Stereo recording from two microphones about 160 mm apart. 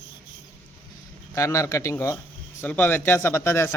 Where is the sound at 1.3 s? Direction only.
20° left (ahead or behind).